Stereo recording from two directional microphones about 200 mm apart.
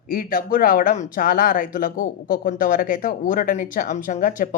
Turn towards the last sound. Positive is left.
turn(degrees=40)  # may be behind; listen again after turning